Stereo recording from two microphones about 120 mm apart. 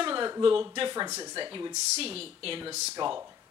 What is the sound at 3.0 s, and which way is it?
Speech, 40° right (ahead or behind).